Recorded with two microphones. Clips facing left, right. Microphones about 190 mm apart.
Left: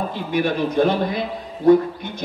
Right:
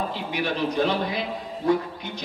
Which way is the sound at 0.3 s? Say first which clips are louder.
Left 7 dB; 50° left (ahead or behind).